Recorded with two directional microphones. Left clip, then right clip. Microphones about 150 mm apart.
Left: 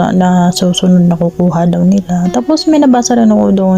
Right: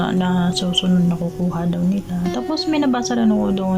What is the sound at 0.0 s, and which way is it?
Speech, 40° left (ahead or behind).